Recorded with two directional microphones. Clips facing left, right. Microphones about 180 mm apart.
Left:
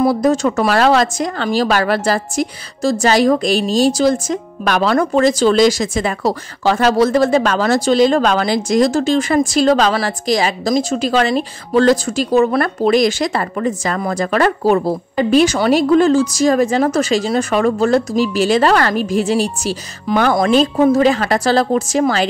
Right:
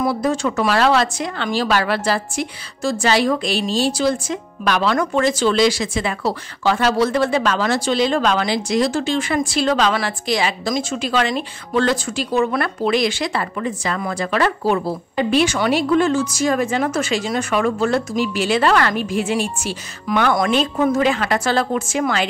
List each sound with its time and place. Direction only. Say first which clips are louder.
0.0 s speech: left 5 dB; 40° left (ahead or behind)